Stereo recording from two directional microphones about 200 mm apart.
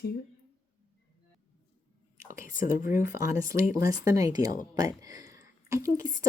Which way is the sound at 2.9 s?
15° right (ahead or behind).